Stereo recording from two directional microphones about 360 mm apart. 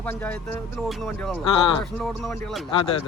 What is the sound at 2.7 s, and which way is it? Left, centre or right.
Speech, centre.